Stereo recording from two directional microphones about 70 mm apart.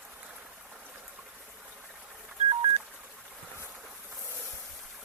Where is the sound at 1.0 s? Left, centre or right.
Centre.